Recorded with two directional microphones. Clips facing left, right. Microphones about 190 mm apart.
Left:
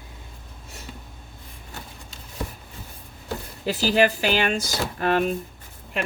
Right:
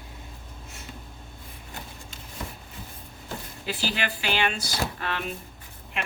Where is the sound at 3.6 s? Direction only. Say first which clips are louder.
Left 10 dB; 40° left (ahead or behind).